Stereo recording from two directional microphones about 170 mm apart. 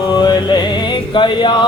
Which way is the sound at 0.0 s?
25° left (ahead or behind).